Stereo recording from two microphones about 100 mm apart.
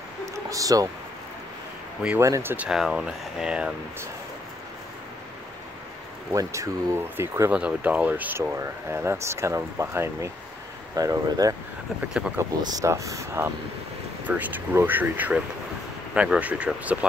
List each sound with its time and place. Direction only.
0.5 s speech: 35° right (ahead or behind)
2.1 s speech: 30° right (ahead or behind)
2.5 s speech: 15° right (ahead or behind)
6.3 s speech: 35° right (ahead or behind)
7.5 s speech: 10° right (ahead or behind); by 11.5 s 35° right (ahead or behind)
12.1 s speech: 5° right (ahead or behind)
12.6 s speech: 35° right (ahead or behind)
14.2 s speech: 15° right (ahead or behind)